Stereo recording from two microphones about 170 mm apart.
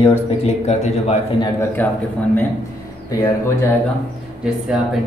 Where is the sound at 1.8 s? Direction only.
10° left (ahead or behind).